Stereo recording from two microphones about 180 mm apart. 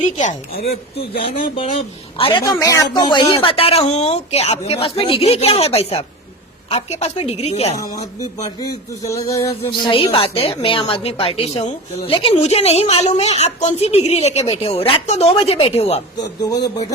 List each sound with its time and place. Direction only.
0.0 s a woman's voice: 40° left (ahead or behind)
0.5 s speech: 55° left (ahead or behind)
0.9 s a woman's voice: 30° left (ahead or behind)
9.0 s music: 15° left (ahead or behind)
9.4 s a woman's voice: 25° left (ahead or behind)
16.1 s speech: 20° left (ahead or behind)